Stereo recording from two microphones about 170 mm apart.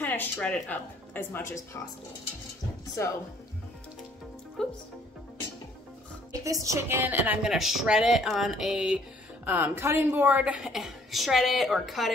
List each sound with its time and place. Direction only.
0.0 s a woman's voice: 10° left (ahead or behind)
3.0 s a woman's voice: 15° left (ahead or behind)
4.6 s a woman's voice: 5° left (ahead or behind)
6.4 s a woman's voice: 20° right (ahead or behind); by 12.1 s centre (ahead or behind)